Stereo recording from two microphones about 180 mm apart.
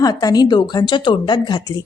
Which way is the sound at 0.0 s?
20° left (ahead or behind).